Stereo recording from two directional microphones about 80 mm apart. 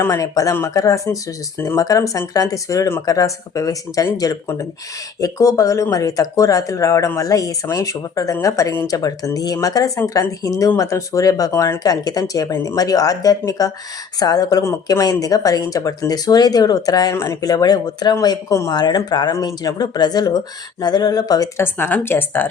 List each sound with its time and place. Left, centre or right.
0.0 s speech: left
11.5 s speech: left
11.8 s speech: left
18.7 s speech: left
21.6 s speech: left